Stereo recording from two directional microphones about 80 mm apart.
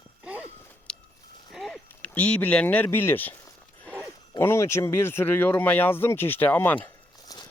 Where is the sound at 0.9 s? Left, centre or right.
Centre.